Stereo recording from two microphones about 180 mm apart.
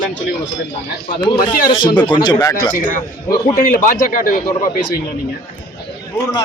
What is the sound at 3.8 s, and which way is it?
Speech, 50° left (ahead or behind).